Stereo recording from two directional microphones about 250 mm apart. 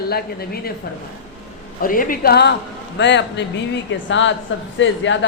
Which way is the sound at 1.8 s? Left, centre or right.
Left.